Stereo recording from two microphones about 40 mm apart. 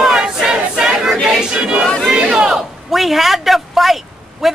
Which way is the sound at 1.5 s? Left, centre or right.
Right.